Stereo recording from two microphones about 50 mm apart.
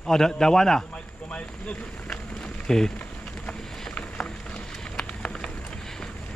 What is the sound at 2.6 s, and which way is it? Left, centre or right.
Speech, centre.